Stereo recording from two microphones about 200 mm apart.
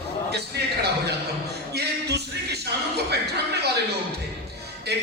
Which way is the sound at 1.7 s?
55° right (ahead or behind).